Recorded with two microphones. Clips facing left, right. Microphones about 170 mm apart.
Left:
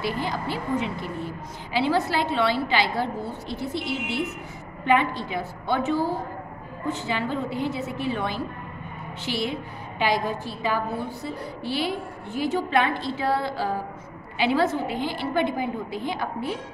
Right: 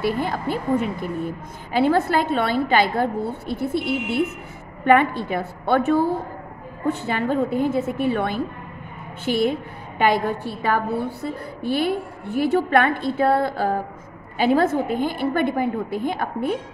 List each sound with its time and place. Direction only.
0.0 s a woman's voice: 55° right (ahead or behind)